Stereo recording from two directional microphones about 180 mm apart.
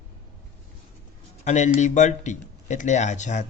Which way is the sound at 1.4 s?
40° left (ahead or behind).